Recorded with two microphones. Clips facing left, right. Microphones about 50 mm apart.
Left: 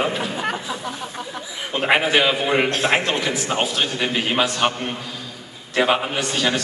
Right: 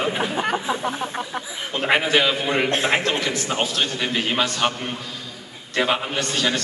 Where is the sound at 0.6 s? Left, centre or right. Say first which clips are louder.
Right 4 dB; right.